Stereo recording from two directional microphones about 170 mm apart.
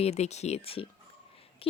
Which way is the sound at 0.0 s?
40° left (ahead or behind).